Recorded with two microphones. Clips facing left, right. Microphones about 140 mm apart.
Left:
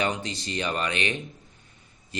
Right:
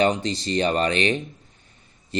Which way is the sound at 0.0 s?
30° right (ahead or behind).